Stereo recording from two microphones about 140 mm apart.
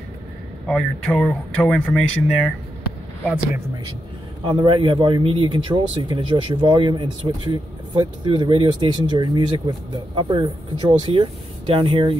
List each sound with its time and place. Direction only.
0.7 s speech: 5° left (ahead or behind)
4.5 s speech: 35° right (ahead or behind)